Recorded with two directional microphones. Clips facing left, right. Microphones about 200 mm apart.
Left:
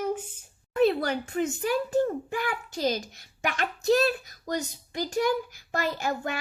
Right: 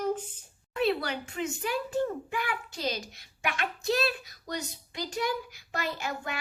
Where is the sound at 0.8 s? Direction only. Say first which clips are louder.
Left 5 dB; 45° left (ahead or behind).